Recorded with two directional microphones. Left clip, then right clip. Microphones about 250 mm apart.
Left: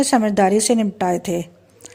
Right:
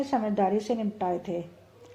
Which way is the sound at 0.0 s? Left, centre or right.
Left.